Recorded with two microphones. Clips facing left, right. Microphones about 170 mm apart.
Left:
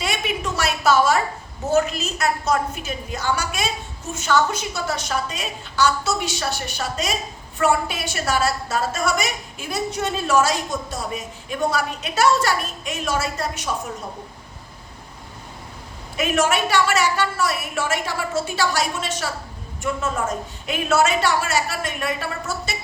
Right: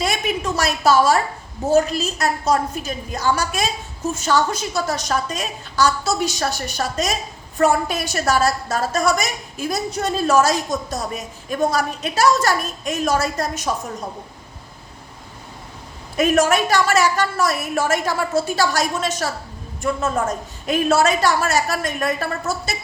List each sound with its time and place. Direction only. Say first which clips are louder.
0.0 s a woman's voice: right 3 dB; 40° right (ahead or behind)
16.1 s a woman's voice: right 4 dB; 45° right (ahead or behind)
20.7 s a woman's voice: right 3 dB; 40° right (ahead or behind)